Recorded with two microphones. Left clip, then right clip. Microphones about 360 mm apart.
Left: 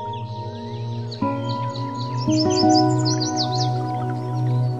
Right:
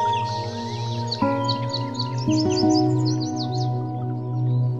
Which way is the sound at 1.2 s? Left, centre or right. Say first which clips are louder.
Right 1 dB; centre.